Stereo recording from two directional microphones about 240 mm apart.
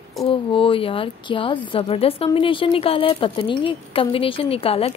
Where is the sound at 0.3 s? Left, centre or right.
Left.